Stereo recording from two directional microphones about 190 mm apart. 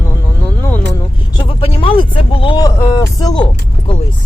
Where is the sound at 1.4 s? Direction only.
30° left (ahead or behind).